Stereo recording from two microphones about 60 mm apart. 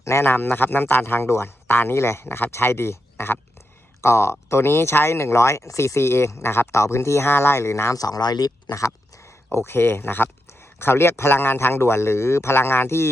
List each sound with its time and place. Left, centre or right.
0.0 s a man's voice: left
7.9 s speech: left
9.5 s a man's voice: left